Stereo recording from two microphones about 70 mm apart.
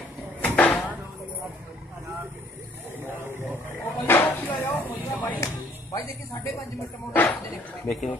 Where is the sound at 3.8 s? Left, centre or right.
Left.